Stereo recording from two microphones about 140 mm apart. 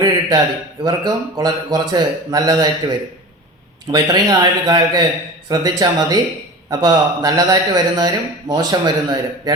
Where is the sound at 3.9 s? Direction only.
30° right (ahead or behind).